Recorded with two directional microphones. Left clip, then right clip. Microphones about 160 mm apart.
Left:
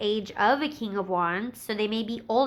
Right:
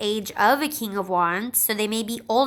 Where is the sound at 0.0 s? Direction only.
20° right (ahead or behind).